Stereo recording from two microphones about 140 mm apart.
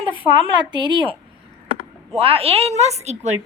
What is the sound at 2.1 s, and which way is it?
A woman's voice, 45° right (ahead or behind).